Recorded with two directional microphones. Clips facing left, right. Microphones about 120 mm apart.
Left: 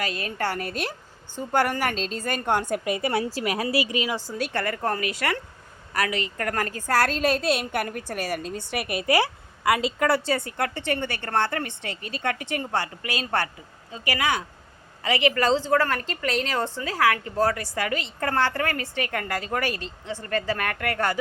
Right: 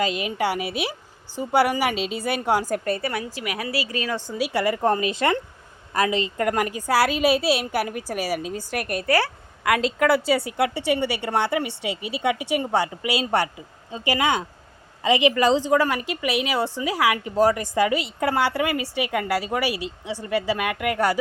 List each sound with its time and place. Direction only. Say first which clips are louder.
0.0 s speech: right 5 dB; 20° right (ahead or behind)
2.8 s a woman's voice: right 1 dB; 15° left (ahead or behind)
3.1 s a woman's voice: left 4 dB; 30° left (ahead or behind); by 4.4 s 15° left (ahead or behind)
4.4 s a woman's voice: right 7 dB; 10° right (ahead or behind); by 9.3 s 15° left (ahead or behind)
9.6 s speech: right 2 dB; centre (ahead or behind)